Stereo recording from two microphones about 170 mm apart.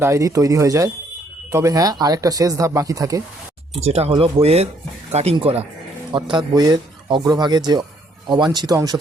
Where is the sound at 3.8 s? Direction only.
40° right (ahead or behind).